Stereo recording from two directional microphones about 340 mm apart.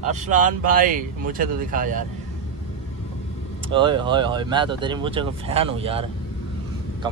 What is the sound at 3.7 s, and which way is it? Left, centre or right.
Speech, centre.